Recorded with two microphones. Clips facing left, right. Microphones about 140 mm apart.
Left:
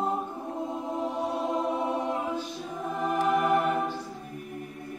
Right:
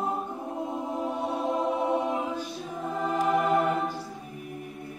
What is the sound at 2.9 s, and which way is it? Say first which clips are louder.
Choir: even; 15° left (ahead or behind).